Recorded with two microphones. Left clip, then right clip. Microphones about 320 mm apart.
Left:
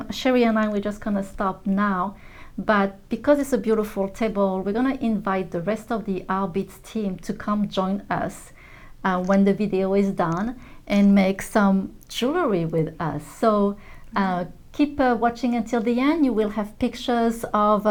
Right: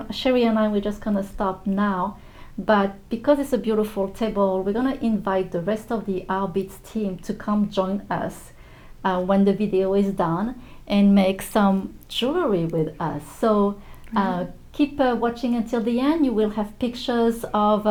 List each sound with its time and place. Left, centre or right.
0.0 s speech: left